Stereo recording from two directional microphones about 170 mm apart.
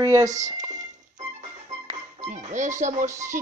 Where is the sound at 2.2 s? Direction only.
45° right (ahead or behind).